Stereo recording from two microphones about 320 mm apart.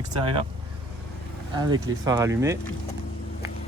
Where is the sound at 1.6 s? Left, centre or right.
Centre.